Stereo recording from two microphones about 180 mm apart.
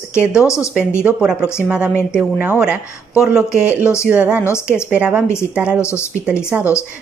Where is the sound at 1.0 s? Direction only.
5° right (ahead or behind).